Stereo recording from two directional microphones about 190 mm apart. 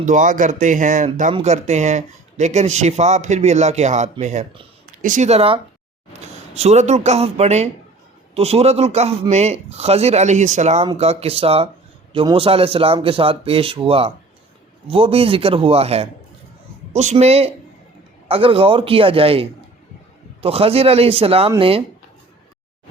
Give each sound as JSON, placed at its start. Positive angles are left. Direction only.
{"t": 0.0, "sound": "a man's voice", "side_deg": -40}